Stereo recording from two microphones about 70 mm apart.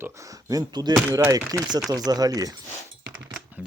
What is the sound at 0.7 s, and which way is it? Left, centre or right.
Speech, right.